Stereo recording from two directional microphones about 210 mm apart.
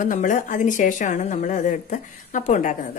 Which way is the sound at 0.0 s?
40° left (ahead or behind).